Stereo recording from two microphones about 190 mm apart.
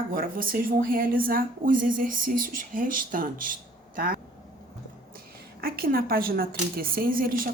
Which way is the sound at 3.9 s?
50° right (ahead or behind).